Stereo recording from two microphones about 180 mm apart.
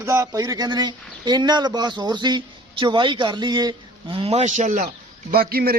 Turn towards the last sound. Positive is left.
turn(degrees=-55)  # may be behind; listen again after turning